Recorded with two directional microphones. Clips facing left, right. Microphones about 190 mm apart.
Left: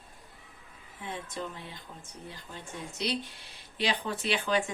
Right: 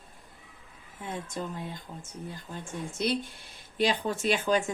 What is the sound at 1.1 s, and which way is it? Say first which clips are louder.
Speech: right 3 dB; 45° right (ahead or behind).